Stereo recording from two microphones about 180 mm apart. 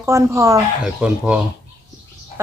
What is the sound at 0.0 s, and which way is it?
Speech, 15° right (ahead or behind).